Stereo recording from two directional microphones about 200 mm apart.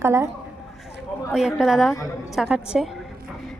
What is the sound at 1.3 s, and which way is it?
Speech, 5° right (ahead or behind).